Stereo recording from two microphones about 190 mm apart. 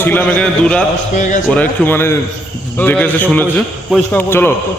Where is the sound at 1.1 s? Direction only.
40° left (ahead or behind).